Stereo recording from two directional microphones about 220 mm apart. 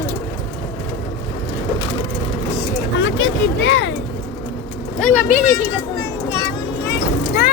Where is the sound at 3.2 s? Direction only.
55° left (ahead or behind).